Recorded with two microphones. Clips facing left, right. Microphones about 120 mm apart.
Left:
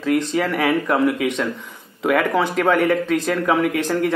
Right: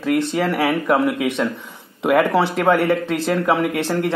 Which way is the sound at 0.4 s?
10° right (ahead or behind).